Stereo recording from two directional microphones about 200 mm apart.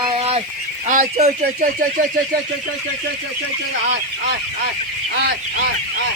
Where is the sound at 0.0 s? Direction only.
25° right (ahead or behind).